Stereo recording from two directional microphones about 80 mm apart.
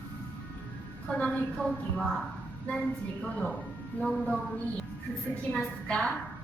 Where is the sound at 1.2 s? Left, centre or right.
Centre.